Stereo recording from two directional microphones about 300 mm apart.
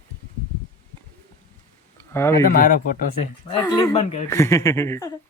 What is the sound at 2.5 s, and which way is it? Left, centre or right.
Speech, left.